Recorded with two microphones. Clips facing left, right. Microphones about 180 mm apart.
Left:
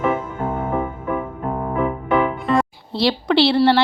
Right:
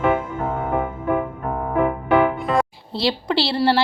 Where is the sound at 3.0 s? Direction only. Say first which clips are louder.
Left 5 dB; centre (ahead or behind).